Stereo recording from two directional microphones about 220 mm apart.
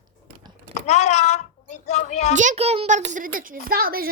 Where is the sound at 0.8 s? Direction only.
30° left (ahead or behind).